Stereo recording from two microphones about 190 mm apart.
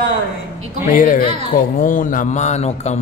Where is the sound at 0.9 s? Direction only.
45° left (ahead or behind).